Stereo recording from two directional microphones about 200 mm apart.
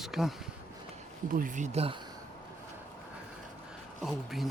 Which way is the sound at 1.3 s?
40° right (ahead or behind).